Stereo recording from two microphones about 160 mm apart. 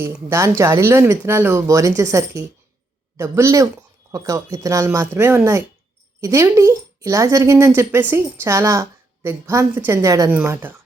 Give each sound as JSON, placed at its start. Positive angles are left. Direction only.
{"t": 0.0, "sound": "speech", "side_deg": -15}